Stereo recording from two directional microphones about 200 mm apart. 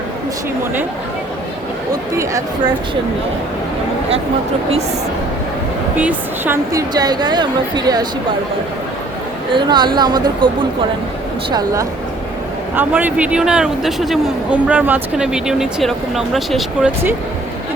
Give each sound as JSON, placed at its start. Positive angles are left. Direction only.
{"t": 1.9, "sound": "speech", "side_deg": -15}
{"t": 6.0, "sound": "a woman's voice", "side_deg": -10}
{"t": 9.5, "sound": "a woman's voice", "side_deg": -20}